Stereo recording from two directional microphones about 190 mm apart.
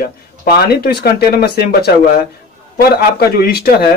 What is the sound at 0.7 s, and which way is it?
Speech, 55° left (ahead or behind).